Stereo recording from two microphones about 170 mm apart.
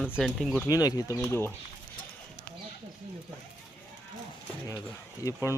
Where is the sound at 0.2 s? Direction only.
Centre (ahead or behind).